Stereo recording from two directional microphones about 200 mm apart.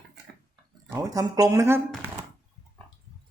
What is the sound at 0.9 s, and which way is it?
Speech, 15° right (ahead or behind).